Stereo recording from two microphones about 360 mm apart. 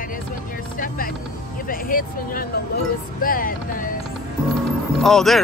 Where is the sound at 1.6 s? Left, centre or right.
Left.